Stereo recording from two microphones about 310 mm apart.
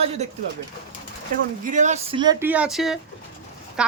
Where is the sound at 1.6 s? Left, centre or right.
Right.